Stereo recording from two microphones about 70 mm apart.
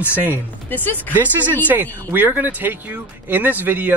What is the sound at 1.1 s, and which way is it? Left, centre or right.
Speech, right.